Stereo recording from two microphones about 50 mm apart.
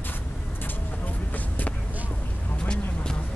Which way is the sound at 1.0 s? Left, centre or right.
Left.